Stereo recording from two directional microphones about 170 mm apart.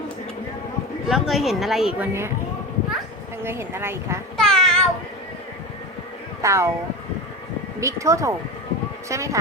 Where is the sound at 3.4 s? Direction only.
15° right (ahead or behind).